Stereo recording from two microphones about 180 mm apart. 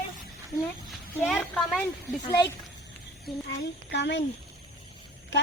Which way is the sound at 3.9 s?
70° left (ahead or behind).